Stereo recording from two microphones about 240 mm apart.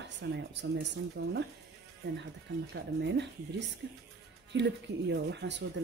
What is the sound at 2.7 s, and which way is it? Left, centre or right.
Speech, right.